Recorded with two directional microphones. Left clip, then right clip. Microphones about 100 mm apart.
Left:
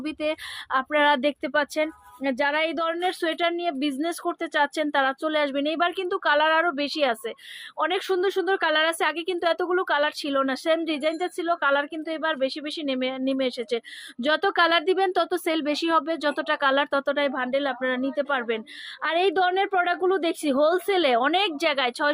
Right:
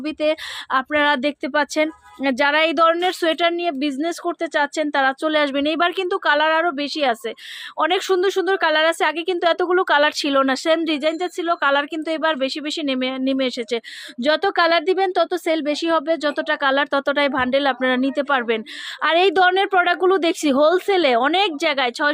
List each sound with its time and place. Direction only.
0.0 s speech: 40° right (ahead or behind)
5.2 s speech: 60° right (ahead or behind); by 7.2 s 30° right (ahead or behind)
7.8 s speech: 55° right (ahead or behind); by 17.0 s 35° right (ahead or behind)
17.1 s a woman's voice: 60° right (ahead or behind); by 22.1 s 40° right (ahead or behind)